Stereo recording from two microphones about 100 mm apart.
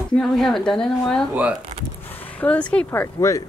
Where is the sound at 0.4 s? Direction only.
5° left (ahead or behind).